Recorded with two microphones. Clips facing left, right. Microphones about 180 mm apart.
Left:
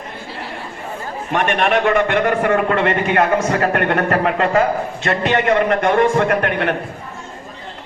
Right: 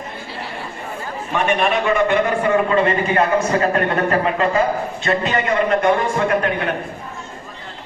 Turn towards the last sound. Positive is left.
turn(degrees=70)  # may be behind; listen again after turning